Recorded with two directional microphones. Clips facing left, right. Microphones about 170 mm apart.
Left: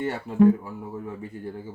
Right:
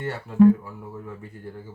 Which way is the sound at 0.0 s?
15° left (ahead or behind).